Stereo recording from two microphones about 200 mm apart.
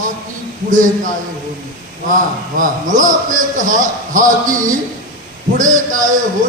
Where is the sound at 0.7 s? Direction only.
40° right (ahead or behind).